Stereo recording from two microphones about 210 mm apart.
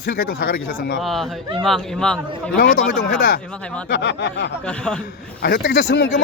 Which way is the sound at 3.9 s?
55° left (ahead or behind).